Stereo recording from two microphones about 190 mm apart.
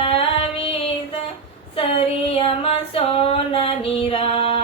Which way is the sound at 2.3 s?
30° left (ahead or behind).